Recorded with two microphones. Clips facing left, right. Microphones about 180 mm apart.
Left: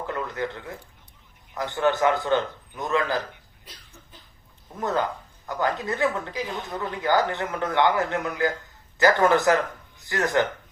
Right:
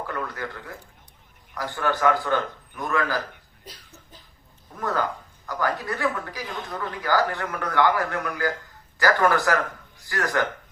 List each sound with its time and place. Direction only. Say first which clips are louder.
0.1 s speech: left 2 dB; 20° left (ahead or behind)
4.8 s speech: left 1 dB; 20° left (ahead or behind)